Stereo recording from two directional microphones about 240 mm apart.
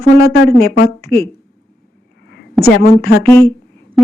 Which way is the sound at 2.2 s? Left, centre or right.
Left.